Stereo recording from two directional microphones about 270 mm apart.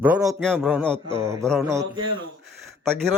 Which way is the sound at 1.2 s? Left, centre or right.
Centre.